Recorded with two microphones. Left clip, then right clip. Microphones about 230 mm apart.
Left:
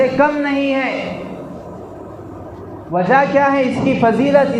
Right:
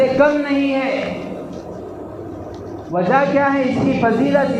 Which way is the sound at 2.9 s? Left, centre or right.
Left.